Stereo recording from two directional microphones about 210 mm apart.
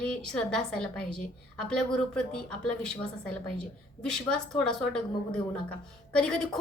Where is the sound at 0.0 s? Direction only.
5° left (ahead or behind).